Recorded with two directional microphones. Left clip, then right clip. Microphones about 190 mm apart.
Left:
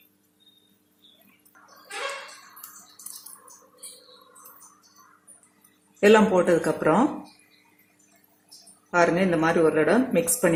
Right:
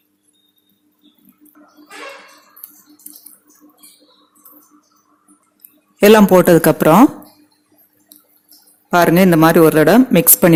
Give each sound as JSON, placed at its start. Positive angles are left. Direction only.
{"t": 6.0, "sound": "a woman's voice", "side_deg": -55}
{"t": 8.9, "sound": "a woman's voice", "side_deg": -55}